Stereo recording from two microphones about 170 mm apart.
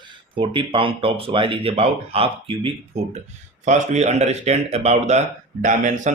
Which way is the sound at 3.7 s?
45° right (ahead or behind).